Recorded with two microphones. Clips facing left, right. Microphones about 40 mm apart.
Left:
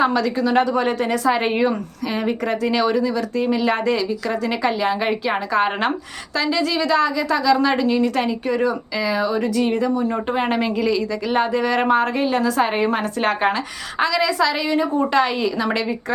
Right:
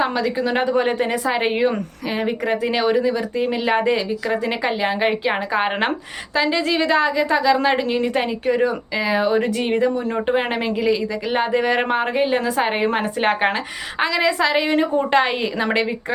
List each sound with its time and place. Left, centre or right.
0.0 s a woman's voice: centre; by 16.1 s right